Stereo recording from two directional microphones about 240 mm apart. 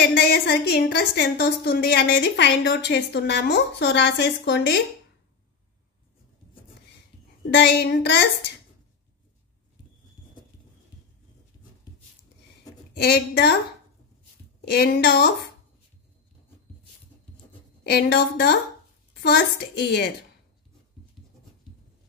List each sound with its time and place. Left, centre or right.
0.0 s a woman's voice: left
7.5 s a woman's voice: left
13.0 s a woman's voice: left
14.7 s a woman's voice: left
17.8 s a woman's voice: left